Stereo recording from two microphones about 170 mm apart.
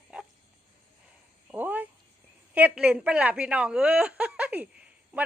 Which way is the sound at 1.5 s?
10° right (ahead or behind).